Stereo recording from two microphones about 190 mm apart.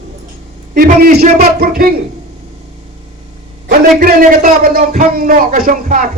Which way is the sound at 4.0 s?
50° right (ahead or behind).